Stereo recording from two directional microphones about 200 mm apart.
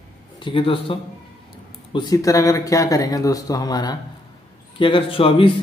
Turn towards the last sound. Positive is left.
turn(degrees=25)  # may be behind; listen again after turning